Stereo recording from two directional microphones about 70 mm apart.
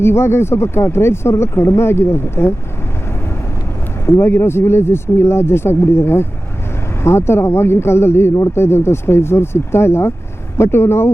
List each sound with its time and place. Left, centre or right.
0.0 s speech: left
4.0 s speech: left